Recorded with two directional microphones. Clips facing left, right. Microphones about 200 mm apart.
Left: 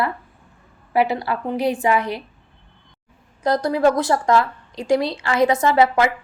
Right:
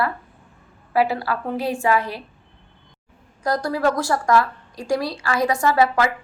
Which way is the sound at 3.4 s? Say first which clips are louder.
Left 4 dB; 20° left (ahead or behind).